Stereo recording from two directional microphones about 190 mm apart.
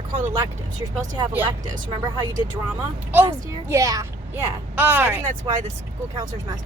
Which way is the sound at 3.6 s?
15° right (ahead or behind).